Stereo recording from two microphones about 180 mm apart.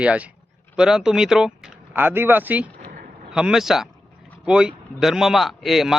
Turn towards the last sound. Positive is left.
turn(degrees=0)  # may be behind; listen again after turning